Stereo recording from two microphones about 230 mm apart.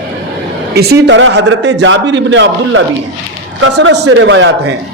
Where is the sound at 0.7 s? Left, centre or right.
Right.